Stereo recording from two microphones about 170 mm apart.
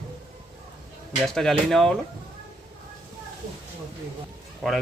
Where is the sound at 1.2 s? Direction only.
5° left (ahead or behind).